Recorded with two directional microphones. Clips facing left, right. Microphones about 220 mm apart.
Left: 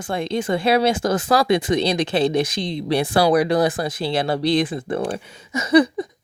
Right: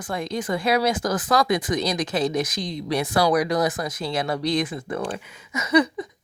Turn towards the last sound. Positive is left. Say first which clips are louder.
# left 5 dB
turn(degrees=30)  # may be behind; listen again after turning